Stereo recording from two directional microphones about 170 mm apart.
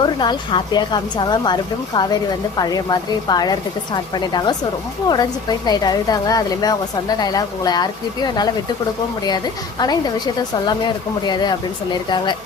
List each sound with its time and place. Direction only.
0.0 s a woman's voice: 25° left (ahead or behind)
2.6 s a woman's voice: 25° left (ahead or behind)